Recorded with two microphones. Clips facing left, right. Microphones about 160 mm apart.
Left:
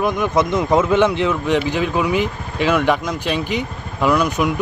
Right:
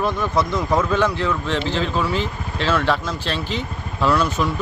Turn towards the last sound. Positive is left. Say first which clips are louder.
# left 2 dB
turn(degrees=15)  # may be behind; listen again after turning